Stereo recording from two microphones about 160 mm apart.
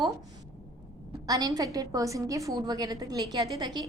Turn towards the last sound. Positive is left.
turn(degrees=-25)  # may be behind; listen again after turning